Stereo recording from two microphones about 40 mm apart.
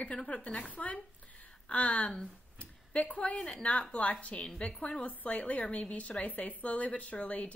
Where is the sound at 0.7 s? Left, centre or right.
Left.